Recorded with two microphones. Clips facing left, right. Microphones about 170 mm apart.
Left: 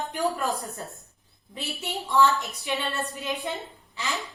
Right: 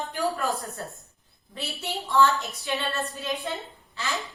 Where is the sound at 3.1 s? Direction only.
20° left (ahead or behind).